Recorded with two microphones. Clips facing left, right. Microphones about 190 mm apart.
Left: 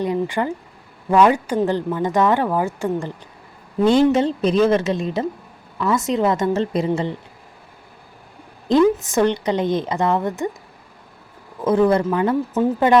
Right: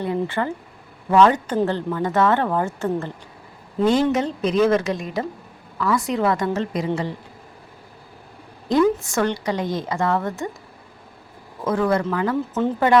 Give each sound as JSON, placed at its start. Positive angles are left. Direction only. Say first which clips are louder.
{"t": 0.0, "sound": "a woman's voice", "louder": "left 2 dB", "side_deg": 15}
{"t": 3.8, "sound": "a woman's voice", "louder": "left 4 dB", "side_deg": 30}
{"t": 8.7, "sound": "a woman's voice", "louder": "left 3 dB", "side_deg": 20}
{"t": 11.6, "sound": "a woman's voice", "louder": "left 4 dB", "side_deg": 20}